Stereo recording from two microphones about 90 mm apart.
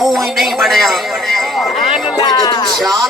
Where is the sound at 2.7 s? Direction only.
Centre (ahead or behind).